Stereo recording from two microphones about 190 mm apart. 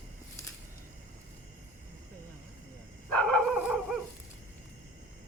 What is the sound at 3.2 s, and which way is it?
Dog, centre (ahead or behind).